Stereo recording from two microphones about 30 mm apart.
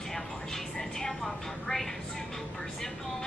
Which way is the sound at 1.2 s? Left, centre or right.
Centre.